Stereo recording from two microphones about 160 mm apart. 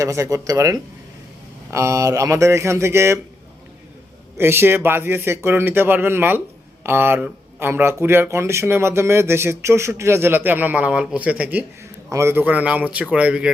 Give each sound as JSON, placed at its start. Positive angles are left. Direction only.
{"t": 0.0, "sound": "speech", "side_deg": -20}
{"t": 4.4, "sound": "speech", "side_deg": -15}